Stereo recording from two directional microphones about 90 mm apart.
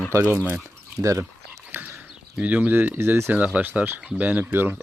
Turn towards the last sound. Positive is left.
turn(degrees=-20)  # may be behind; listen again after turning